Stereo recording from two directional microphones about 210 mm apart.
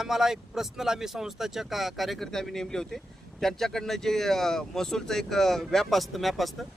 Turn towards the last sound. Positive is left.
turn(degrees=0)  # may be behind; listen again after turning